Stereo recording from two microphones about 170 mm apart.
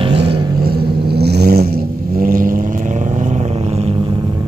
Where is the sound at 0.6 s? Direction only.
70° right (ahead or behind).